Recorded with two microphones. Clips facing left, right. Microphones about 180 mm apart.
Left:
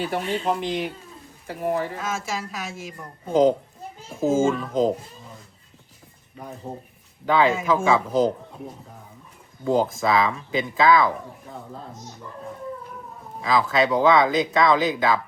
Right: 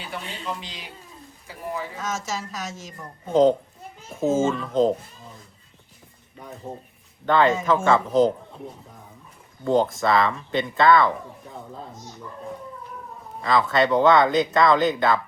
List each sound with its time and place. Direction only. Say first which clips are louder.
0.0 s speech: left 9 dB; 55° left (ahead or behind)
2.0 s a woman's voice: left 1 dB; 10° left (ahead or behind)
4.3 s speech: left 1 dB; 10° left (ahead or behind)
7.3 s speech: right 1 dB; 5° left (ahead or behind)
9.6 s speech: right 1 dB; centre (ahead or behind)
13.4 s speech: even; centre (ahead or behind)